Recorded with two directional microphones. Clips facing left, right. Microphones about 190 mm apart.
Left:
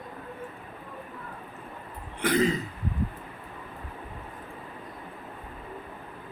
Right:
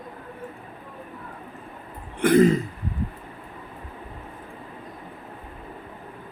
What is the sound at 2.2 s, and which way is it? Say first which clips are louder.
Throat clearing: right 8 dB; 50° right (ahead or behind).